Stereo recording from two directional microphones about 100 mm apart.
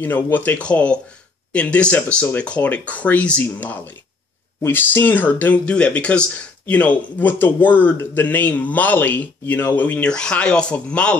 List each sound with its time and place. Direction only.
0.0 s speech: 20° left (ahead or behind)